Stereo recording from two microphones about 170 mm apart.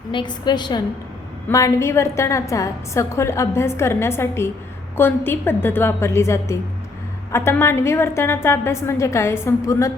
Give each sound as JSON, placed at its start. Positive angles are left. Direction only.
{"t": 0.1, "sound": "a woman's voice", "side_deg": 25}